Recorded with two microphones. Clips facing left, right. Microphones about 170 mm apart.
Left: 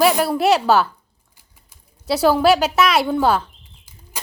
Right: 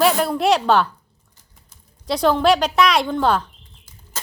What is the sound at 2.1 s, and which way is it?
A woman's voice, 5° left (ahead or behind).